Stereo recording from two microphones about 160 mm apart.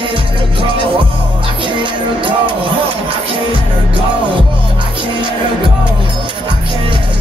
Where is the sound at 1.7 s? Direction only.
30° right (ahead or behind).